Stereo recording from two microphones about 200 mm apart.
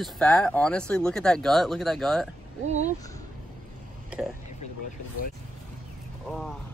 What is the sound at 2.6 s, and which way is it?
Speech, 35° right (ahead or behind).